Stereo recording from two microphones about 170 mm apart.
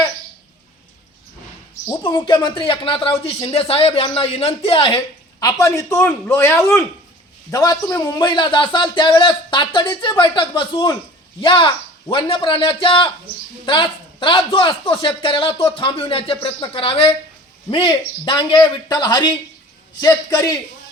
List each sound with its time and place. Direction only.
2.0 s speech: 30° left (ahead or behind)
5.4 s a man's voice: 20° left (ahead or behind)